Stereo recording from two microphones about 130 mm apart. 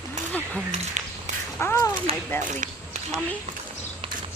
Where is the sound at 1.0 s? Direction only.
65° right (ahead or behind).